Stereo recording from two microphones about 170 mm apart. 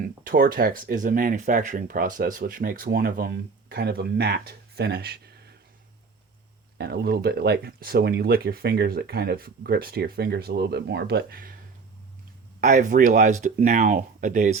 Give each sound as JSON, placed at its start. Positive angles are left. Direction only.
{"t": 0.3, "sound": "speech", "side_deg": -55}
{"t": 6.7, "sound": "speech", "side_deg": -75}
{"t": 12.5, "sound": "speech", "side_deg": -50}